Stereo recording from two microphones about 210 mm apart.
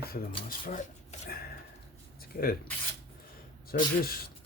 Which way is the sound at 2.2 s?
45° left (ahead or behind).